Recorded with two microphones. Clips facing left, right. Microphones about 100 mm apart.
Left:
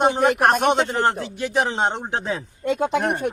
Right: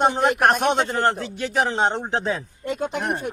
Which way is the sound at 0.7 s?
15° left (ahead or behind).